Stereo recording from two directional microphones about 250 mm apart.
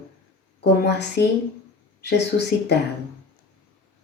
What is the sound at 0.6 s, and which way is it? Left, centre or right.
Speech, left.